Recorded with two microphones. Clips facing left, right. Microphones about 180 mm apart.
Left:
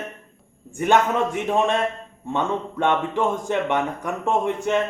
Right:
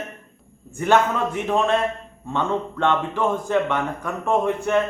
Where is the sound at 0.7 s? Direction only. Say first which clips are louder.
Even; 20° left (ahead or behind).